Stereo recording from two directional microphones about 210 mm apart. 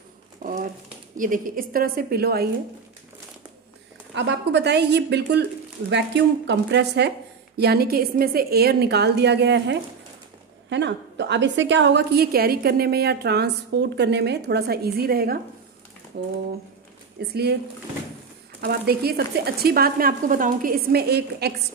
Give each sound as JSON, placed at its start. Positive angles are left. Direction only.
{"t": 0.4, "sound": "a sound", "side_deg": -40}
{"t": 1.1, "sound": "a woman's voice", "side_deg": -40}
{"t": 4.1, "sound": "a woman's voice", "side_deg": -60}
{"t": 17.2, "sound": "a woman's voice", "side_deg": -50}
{"t": 18.6, "sound": "a woman's voice", "side_deg": -50}